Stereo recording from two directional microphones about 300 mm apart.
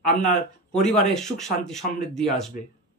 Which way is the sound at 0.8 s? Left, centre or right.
Centre.